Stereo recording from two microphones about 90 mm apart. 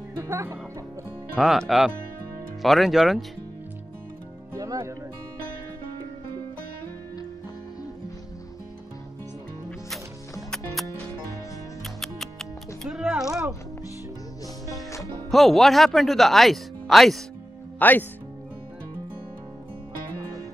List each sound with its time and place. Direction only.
0.2 s speech: 30° right (ahead or behind)
1.4 s speech: 5° right (ahead or behind)
2.6 s speech: centre (ahead or behind)
4.6 s music: 35° right (ahead or behind)
10.5 s music: centre (ahead or behind)
13.0 s a sound: 10° right (ahead or behind)
15.0 s speech: centre (ahead or behind)
17.7 s speech: 20° left (ahead or behind)